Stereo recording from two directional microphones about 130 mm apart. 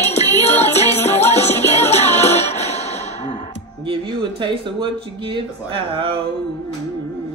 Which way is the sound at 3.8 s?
40° right (ahead or behind).